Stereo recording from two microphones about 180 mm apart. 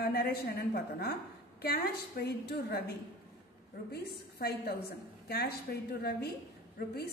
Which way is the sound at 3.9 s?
60° left (ahead or behind).